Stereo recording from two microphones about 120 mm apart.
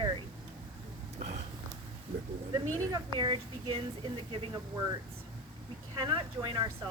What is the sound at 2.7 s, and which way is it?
Speech, 35° right (ahead or behind).